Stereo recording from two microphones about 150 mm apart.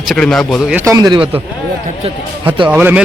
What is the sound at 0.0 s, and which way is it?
Speech, centre (ahead or behind).